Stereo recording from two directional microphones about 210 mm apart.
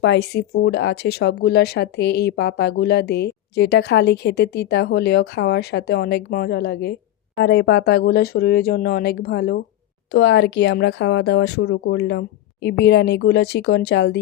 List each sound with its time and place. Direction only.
0.0 s speech: 55° left (ahead or behind)